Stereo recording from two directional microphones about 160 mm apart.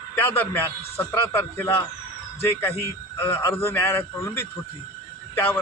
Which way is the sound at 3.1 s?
15° left (ahead or behind).